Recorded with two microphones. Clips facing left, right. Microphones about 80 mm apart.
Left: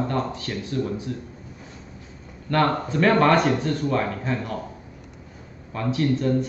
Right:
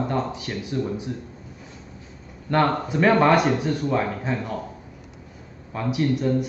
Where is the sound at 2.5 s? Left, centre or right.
Centre.